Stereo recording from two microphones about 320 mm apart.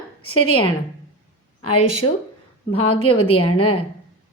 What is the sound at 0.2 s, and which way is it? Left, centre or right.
Speech, left.